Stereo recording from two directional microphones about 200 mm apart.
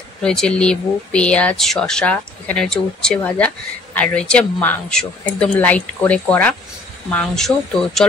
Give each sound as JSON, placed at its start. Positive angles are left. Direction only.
{"t": 0.2, "sound": "speech", "side_deg": 5}